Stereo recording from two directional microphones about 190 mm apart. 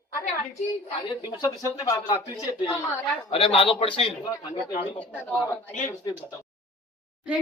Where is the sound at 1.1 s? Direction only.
25° left (ahead or behind).